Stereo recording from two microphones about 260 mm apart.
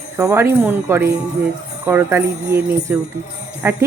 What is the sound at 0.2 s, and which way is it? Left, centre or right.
Speech, centre.